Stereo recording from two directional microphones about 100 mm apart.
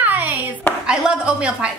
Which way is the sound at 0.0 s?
15° right (ahead or behind).